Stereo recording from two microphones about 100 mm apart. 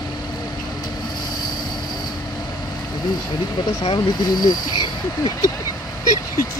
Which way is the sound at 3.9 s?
45° left (ahead or behind).